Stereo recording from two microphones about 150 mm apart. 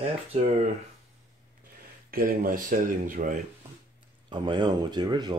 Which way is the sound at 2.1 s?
70° right (ahead or behind).